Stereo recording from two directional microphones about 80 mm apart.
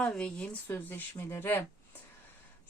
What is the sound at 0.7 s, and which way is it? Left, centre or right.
Speech, left.